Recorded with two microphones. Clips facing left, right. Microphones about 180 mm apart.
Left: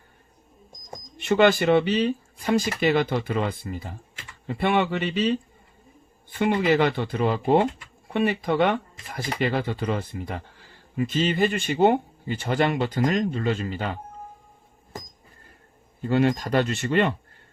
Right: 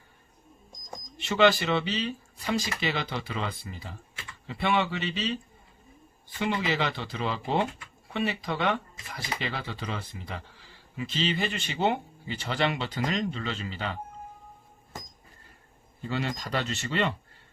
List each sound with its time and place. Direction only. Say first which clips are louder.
1.2 s speech: left 4 dB; 55° left (ahead or behind)
6.4 s speech: left 8 dB; 50° left (ahead or behind)
16.0 s speech: left 10 dB; 50° left (ahead or behind)